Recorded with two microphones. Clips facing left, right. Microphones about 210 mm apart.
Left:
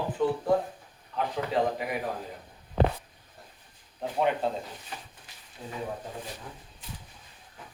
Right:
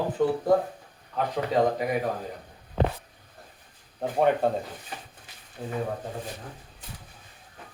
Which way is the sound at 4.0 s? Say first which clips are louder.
Right 4 dB; 50° right (ahead or behind).